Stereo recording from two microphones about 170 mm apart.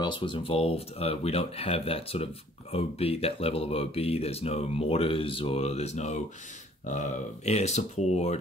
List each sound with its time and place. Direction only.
0.0 s speech: 30° left (ahead or behind)